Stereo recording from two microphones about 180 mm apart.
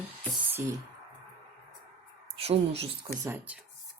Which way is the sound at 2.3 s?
35° right (ahead or behind).